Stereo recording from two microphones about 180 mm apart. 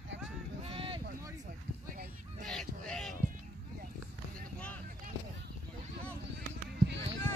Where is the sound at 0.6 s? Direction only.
30° right (ahead or behind).